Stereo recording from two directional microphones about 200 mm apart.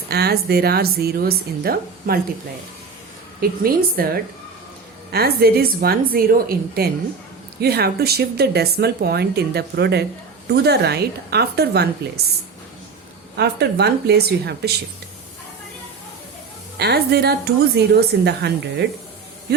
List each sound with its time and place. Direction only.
0.1 s speech: 50° right (ahead or behind)
3.6 s a woman's voice: 50° right (ahead or behind)
16.7 s a woman's voice: 55° right (ahead or behind)